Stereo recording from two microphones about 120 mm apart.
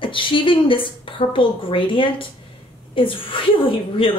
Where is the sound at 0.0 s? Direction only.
45° left (ahead or behind).